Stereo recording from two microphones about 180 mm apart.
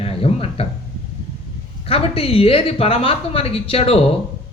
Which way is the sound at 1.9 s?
30° left (ahead or behind).